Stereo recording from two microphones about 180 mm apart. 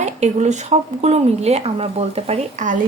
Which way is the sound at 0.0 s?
40° right (ahead or behind).